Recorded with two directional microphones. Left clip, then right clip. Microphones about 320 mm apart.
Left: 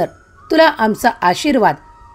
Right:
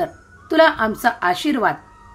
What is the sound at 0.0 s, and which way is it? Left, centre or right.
A woman's voice, left.